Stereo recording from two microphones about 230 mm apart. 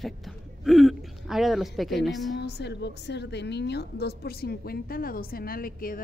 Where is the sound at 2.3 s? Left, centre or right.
Left.